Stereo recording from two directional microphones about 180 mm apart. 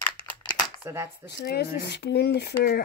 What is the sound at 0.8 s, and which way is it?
Speech, 15° right (ahead or behind).